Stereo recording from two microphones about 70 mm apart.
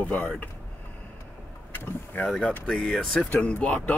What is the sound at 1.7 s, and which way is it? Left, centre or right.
Speech, left.